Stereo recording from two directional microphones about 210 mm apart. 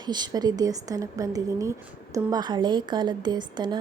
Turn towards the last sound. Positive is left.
turn(degrees=-20)  # may be behind; listen again after turning